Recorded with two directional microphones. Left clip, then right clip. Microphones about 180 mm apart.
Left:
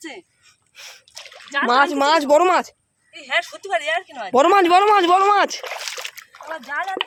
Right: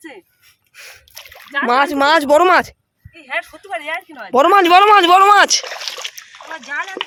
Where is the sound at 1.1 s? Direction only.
30° right (ahead or behind).